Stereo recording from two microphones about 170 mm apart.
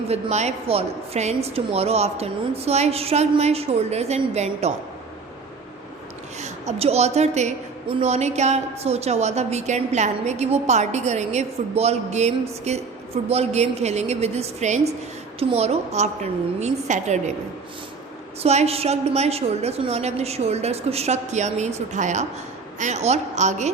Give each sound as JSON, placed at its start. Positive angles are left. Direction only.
{"t": 0.1, "sound": "a woman's voice", "side_deg": -40}
{"t": 6.4, "sound": "a woman's voice", "side_deg": -40}
{"t": 18.4, "sound": "a woman's voice", "side_deg": -40}